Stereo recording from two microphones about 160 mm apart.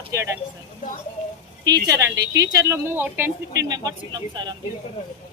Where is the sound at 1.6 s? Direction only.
20° right (ahead or behind).